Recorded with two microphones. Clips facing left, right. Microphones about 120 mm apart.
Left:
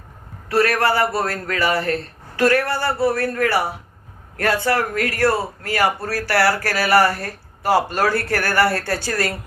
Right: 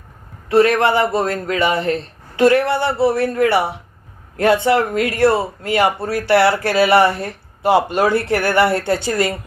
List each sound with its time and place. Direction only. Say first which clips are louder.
0.4 s speech: right 5 dB; 20° right (ahead or behind)